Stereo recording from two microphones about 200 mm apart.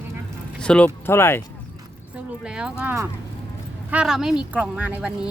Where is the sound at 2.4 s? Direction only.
5° right (ahead or behind).